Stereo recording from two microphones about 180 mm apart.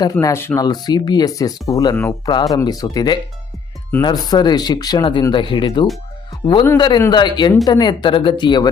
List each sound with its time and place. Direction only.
0.0 s a man's voice: 20° left (ahead or behind)